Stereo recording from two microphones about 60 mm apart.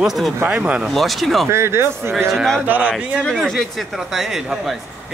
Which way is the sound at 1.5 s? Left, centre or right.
Right.